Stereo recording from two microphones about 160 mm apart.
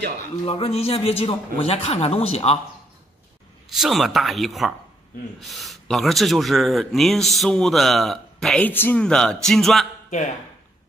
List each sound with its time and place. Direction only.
0.5 s a man's voice: 40° left (ahead or behind)
3.7 s speech: centre (ahead or behind)
10.0 s speech: 45° left (ahead or behind)